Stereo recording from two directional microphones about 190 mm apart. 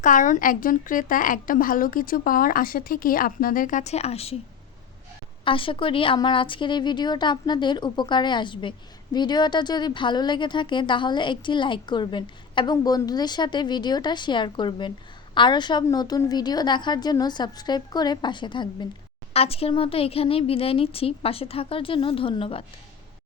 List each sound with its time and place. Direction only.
0.0 s a woman's voice: 45° left (ahead or behind)
5.5 s speech: 25° left (ahead or behind)